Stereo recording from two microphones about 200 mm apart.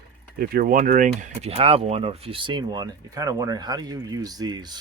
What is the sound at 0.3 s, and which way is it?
Speech, 45° right (ahead or behind).